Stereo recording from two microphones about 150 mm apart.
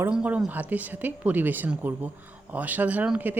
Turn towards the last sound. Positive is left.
turn(degrees=-10)  # may be behind; listen again after turning